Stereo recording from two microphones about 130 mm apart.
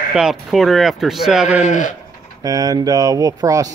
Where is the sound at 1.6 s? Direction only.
70° left (ahead or behind).